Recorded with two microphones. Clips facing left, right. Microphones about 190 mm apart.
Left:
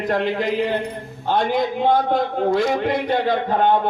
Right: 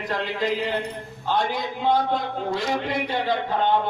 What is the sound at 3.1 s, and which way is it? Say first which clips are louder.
Speech: left 5 dB; 50° left (ahead or behind).